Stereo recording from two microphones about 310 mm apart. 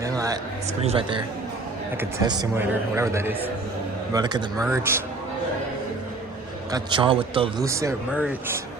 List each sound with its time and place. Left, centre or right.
0.0 s a man's voice: centre
6.7 s a man's voice: centre